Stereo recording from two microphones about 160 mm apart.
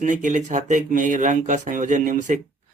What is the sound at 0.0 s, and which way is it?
Speech, 50° right (ahead or behind).